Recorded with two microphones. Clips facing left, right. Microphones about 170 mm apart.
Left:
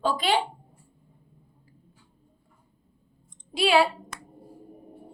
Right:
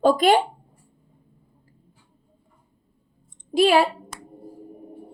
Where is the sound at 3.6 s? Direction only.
45° right (ahead or behind).